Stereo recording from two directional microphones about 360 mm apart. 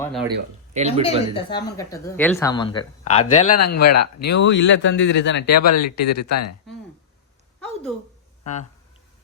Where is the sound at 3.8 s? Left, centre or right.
Left.